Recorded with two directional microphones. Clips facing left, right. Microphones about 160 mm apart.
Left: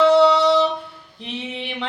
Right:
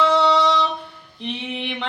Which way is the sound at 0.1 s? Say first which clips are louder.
Left 4 dB; 10° left (ahead or behind).